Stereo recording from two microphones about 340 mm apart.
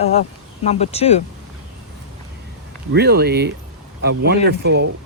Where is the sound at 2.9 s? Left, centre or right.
Right.